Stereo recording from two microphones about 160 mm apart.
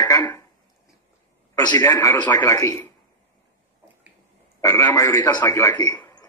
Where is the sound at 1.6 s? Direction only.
25° left (ahead or behind).